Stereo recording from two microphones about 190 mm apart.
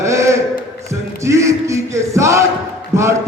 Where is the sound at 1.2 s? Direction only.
15° right (ahead or behind).